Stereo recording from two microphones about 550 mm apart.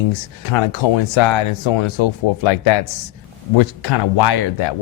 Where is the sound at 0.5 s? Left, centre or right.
Left.